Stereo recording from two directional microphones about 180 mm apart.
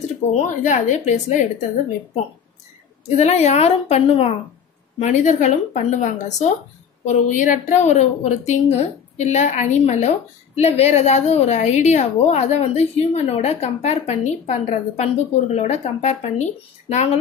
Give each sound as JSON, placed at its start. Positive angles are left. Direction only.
{"t": 0.3, "sound": "a woman's voice", "side_deg": 45}
{"t": 3.2, "sound": "a woman's voice", "side_deg": 40}